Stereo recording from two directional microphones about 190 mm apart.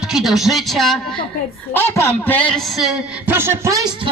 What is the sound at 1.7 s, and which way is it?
A man's voice, 10° left (ahead or behind).